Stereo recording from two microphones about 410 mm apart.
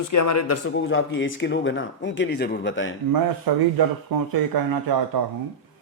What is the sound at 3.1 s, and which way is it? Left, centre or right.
Speech, right.